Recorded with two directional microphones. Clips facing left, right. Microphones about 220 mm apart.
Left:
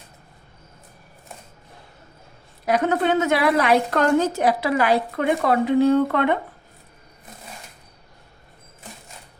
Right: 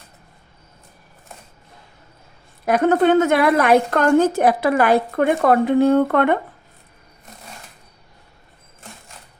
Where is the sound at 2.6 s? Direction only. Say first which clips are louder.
Right 5 dB; 50° right (ahead or behind).